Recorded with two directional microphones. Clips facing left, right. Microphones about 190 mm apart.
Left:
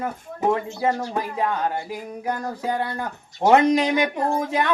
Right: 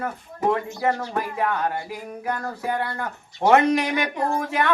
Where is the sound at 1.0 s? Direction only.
15° left (ahead or behind).